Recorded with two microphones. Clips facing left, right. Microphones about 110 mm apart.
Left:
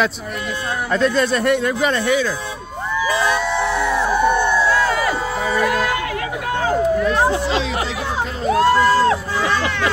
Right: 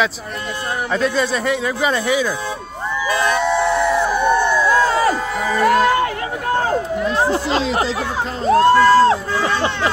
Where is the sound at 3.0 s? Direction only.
5° left (ahead or behind).